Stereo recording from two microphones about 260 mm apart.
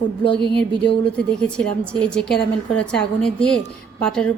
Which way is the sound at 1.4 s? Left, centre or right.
Centre.